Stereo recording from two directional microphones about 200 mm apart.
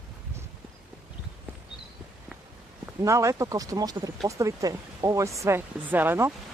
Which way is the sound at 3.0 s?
15° right (ahead or behind).